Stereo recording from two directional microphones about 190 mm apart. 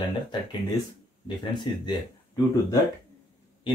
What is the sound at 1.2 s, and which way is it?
Speech, 25° left (ahead or behind).